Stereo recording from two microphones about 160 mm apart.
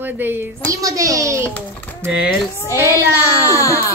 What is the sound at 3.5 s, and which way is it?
Speech, 20° left (ahead or behind).